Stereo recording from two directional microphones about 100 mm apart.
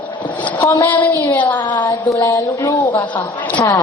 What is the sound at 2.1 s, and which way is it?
Speech, 30° left (ahead or behind).